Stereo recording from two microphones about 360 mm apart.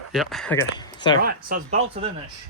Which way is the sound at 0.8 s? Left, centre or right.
Centre.